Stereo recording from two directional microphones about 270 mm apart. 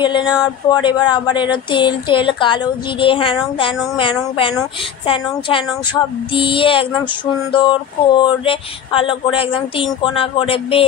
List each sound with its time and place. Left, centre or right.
0.0 s speech: centre